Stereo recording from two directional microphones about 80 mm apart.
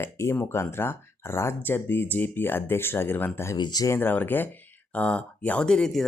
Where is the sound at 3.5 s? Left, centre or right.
Left.